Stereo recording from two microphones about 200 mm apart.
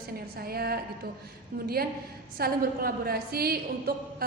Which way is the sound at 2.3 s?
50° right (ahead or behind).